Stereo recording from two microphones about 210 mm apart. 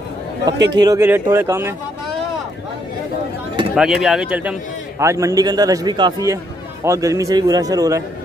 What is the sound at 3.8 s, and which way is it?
A man's voice, centre (ahead or behind).